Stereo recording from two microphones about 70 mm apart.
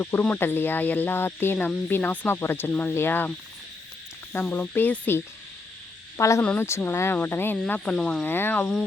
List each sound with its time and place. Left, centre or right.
0.0 s speech: left
6.1 s speech: left
7.9 s speech: centre
8.3 s speech: left